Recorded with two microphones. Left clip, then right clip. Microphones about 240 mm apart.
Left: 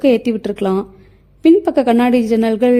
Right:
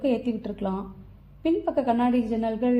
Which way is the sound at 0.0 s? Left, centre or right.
Left.